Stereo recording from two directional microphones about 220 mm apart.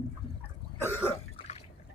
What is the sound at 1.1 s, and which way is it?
Cough, 25° left (ahead or behind).